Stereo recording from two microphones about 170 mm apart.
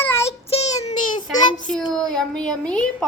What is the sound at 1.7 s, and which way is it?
A woman's voice, 5° left (ahead or behind).